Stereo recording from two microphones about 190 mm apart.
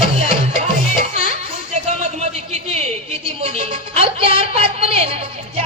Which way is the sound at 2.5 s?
35° right (ahead or behind).